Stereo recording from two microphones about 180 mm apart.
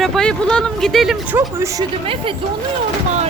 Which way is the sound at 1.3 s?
15° right (ahead or behind).